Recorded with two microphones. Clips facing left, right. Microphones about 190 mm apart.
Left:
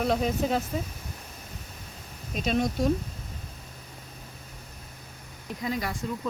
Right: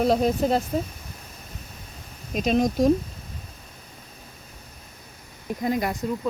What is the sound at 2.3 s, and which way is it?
Speech, 45° right (ahead or behind).